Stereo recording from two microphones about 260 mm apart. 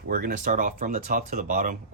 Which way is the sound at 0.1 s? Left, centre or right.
Right.